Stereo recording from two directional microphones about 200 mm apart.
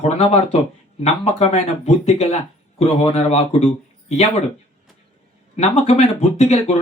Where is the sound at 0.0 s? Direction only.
30° left (ahead or behind).